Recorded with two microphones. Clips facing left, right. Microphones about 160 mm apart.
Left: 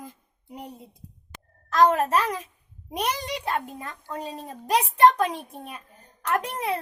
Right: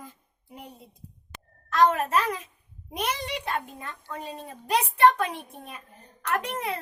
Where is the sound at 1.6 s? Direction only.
40° left (ahead or behind).